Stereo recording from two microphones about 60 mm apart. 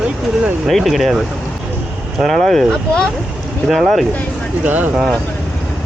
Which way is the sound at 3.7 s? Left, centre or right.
Centre.